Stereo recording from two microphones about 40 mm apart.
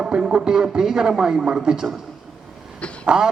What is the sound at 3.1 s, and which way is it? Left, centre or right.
Speech, centre.